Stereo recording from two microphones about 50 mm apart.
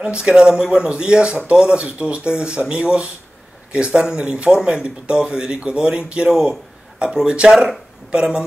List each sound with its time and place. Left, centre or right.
0.0 s a man's voice: centre